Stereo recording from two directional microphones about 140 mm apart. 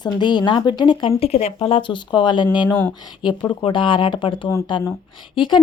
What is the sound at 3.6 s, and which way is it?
Speech, 35° left (ahead or behind).